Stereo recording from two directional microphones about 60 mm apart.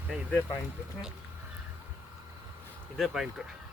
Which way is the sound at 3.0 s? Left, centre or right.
Centre.